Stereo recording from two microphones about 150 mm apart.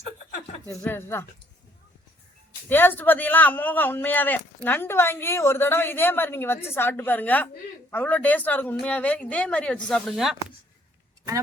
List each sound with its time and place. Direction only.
0.8 s a man's voice: 15° left (ahead or behind)
2.6 s a man's voice: 15° left (ahead or behind)